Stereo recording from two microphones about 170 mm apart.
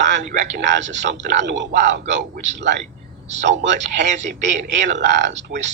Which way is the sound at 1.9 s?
90° right.